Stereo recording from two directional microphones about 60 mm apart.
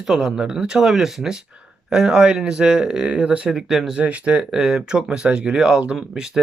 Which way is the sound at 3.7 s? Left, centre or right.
Centre.